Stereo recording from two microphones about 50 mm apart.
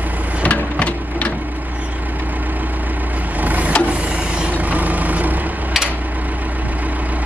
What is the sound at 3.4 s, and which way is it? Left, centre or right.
Vehicle, right.